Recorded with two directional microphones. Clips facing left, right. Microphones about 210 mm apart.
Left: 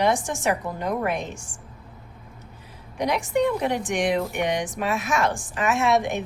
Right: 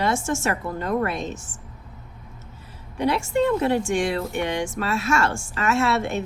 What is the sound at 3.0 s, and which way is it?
Speech, 15° left (ahead or behind).